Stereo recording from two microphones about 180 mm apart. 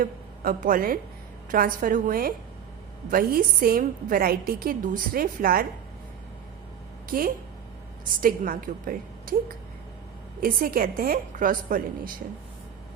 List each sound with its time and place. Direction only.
0.0 s a woman's voice: 50° right (ahead or behind)
8.2 s a woman's voice: 50° right (ahead or behind)
10.4 s a woman's voice: 55° right (ahead or behind)